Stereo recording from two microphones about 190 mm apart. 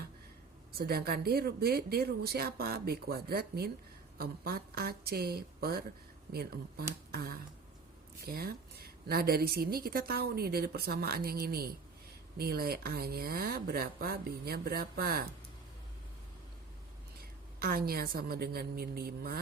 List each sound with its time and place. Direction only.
0.7 s a woman's voice: 55° right (ahead or behind)
17.6 s a woman's voice: 50° right (ahead or behind)